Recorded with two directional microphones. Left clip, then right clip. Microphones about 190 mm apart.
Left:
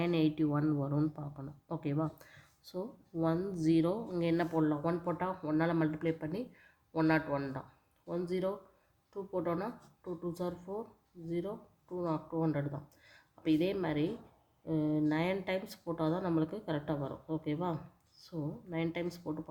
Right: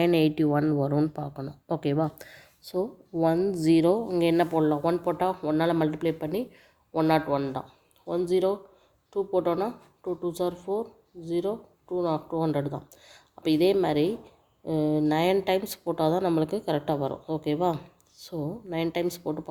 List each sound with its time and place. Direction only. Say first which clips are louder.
0.0 s speech: right 9 dB; 40° right (ahead or behind)